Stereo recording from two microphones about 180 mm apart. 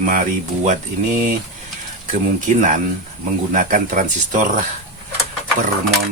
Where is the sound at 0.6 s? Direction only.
45° right (ahead or behind).